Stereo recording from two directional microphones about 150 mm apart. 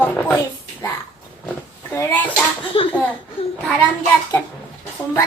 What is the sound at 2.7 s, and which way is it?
Speech, 40° left (ahead or behind).